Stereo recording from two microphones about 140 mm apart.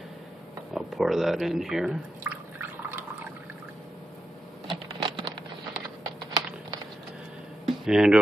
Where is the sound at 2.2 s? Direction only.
10° right (ahead or behind).